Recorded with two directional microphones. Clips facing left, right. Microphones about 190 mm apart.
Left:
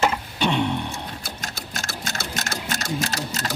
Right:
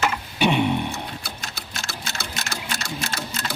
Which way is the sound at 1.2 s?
45° left (ahead or behind).